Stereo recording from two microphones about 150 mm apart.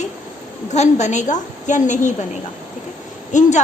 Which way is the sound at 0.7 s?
50° left (ahead or behind).